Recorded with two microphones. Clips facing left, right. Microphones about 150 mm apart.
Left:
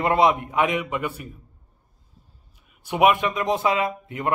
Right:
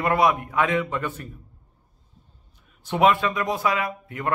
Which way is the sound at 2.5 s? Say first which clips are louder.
Right 1 dB; 10° left (ahead or behind).